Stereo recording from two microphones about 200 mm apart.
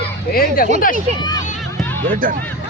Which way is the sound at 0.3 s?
45° left (ahead or behind).